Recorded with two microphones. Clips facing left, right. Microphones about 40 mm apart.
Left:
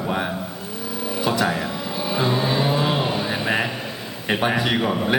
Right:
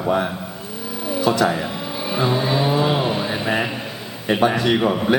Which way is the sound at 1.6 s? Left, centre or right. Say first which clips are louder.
Right 1 dB; centre.